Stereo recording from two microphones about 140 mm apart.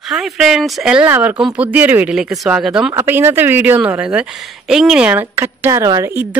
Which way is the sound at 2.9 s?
20° right (ahead or behind).